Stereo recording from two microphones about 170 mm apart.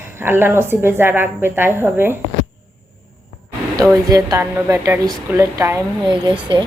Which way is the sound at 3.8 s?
20° right (ahead or behind).